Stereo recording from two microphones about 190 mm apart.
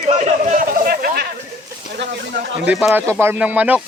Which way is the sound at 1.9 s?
65° right (ahead or behind).